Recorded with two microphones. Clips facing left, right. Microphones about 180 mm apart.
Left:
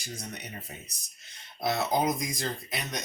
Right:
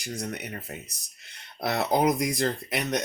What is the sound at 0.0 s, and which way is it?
Speech, 65° right (ahead or behind).